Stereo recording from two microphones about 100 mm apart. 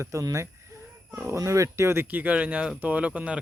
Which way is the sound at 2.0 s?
15° right (ahead or behind).